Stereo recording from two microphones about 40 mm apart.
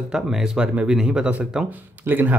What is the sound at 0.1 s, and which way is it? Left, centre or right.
Speech, centre.